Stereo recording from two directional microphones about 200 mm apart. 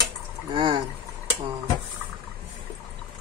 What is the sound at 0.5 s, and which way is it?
Speech, 25° right (ahead or behind).